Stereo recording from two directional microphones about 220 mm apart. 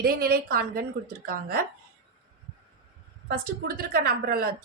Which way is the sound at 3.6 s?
40° right (ahead or behind).